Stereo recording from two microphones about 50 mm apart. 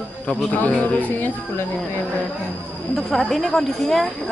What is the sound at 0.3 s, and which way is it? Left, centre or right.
Speech, left.